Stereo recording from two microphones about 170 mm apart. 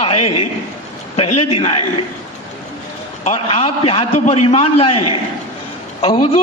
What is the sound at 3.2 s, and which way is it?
A man's voice, 40° left (ahead or behind).